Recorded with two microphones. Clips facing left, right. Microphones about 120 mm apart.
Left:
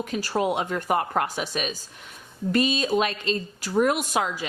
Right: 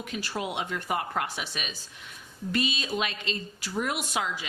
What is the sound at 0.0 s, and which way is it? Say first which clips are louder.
A woman's voice: left 8 dB; 40° left (ahead or behind).